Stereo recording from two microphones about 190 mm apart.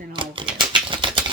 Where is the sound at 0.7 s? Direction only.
25° right (ahead or behind).